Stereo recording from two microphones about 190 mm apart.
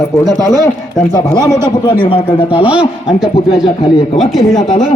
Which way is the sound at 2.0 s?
25° left (ahead or behind).